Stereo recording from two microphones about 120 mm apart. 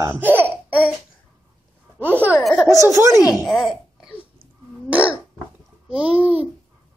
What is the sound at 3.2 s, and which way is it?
Speech, 30° left (ahead or behind).